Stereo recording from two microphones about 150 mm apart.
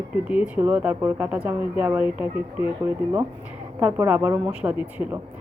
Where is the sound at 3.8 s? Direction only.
10° right (ahead or behind).